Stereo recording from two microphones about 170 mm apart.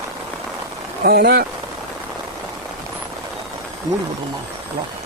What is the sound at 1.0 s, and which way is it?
Speech, 65° right (ahead or behind).